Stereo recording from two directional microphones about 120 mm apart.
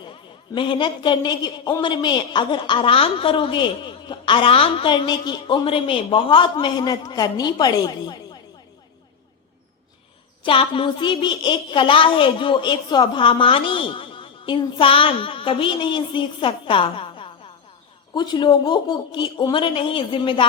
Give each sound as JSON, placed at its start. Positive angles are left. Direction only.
{"t": 0.5, "sound": "a woman's voice", "side_deg": 40}
{"t": 10.4, "sound": "a woman's voice", "side_deg": 45}